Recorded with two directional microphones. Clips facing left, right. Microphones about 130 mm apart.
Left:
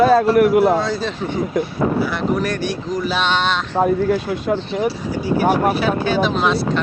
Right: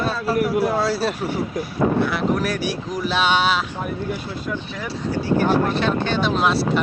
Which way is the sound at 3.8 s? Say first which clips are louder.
Left 10 dB; 90° left.